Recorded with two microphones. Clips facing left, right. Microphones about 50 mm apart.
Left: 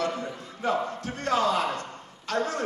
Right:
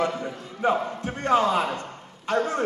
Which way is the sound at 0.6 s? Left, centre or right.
Right.